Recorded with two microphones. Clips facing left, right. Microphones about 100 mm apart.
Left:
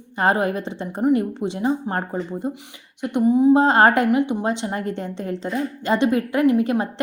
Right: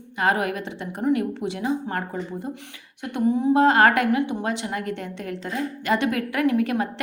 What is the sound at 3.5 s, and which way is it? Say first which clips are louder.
A woman's voice: left 2 dB; 30° left (ahead or behind).